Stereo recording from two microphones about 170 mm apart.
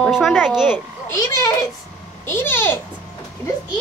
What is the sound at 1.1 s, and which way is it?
A child's voice, 20° left (ahead or behind).